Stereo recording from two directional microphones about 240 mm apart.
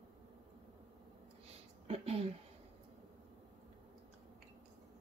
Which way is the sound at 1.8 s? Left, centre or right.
Right.